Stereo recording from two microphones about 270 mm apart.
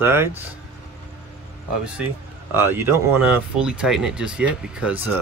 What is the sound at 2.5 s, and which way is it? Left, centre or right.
Speech, centre.